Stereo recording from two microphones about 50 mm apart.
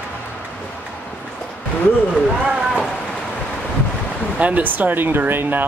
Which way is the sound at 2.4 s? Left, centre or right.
Centre.